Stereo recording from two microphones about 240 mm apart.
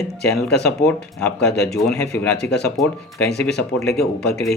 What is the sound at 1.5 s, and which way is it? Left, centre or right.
Speech, left.